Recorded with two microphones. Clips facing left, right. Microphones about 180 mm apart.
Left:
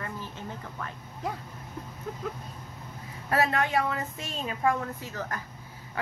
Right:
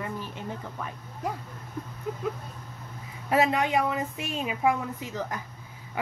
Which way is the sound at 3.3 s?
15° right (ahead or behind).